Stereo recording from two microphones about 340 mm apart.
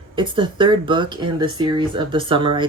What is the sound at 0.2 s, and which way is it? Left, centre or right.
Speech, centre.